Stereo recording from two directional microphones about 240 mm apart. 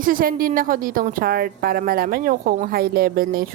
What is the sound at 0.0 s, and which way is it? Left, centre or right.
A woman's voice, right.